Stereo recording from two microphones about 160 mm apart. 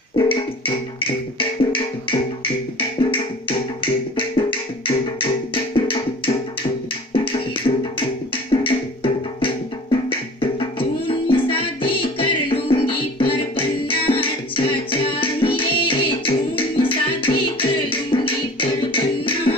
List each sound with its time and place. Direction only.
0.2 s music: 35° left (ahead or behind)
7.7 s music: 40° left (ahead or behind)